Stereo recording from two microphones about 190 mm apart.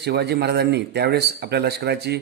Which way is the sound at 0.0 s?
60° right (ahead or behind).